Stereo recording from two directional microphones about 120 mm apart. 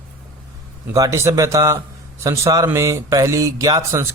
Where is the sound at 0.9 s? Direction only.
25° right (ahead or behind).